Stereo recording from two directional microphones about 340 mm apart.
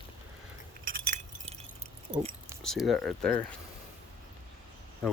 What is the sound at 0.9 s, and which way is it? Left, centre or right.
Keys jangling, right.